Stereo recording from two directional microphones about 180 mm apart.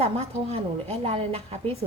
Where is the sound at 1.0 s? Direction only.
30° right (ahead or behind).